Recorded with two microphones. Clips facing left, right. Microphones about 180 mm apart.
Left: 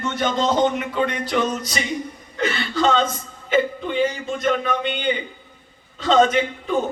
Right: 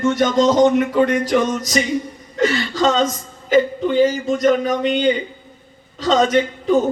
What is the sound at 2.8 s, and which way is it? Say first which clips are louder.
A man's voice: right 1 dB; 45° right (ahead or behind).